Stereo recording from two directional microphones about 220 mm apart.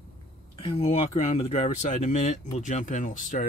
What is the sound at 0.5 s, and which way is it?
Speech, 25° left (ahead or behind).